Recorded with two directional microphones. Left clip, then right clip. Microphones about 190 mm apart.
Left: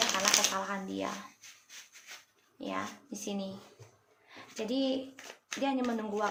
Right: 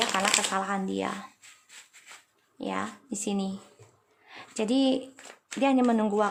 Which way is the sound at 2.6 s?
40° right (ahead or behind).